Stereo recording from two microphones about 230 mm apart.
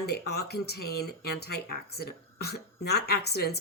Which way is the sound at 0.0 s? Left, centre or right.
Left.